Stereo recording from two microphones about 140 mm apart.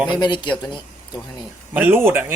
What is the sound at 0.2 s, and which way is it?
Speech, 35° left (ahead or behind).